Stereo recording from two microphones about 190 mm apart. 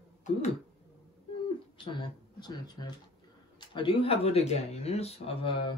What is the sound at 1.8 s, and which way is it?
Speech, 25° left (ahead or behind).